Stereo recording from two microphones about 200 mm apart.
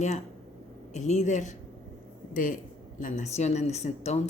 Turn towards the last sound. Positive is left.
turn(degrees=35)  # may be behind; listen again after turning